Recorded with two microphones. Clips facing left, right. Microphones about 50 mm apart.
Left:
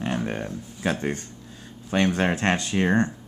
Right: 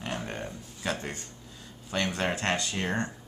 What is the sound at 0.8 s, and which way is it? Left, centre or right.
Speech, left.